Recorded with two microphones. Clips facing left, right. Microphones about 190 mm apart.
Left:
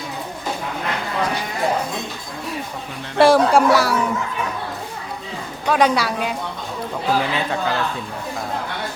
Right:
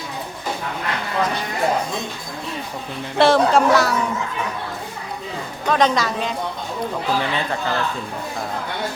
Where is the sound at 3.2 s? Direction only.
10° left (ahead or behind).